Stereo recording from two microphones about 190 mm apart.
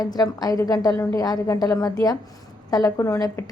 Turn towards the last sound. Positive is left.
turn(degrees=15)  # may be behind; listen again after turning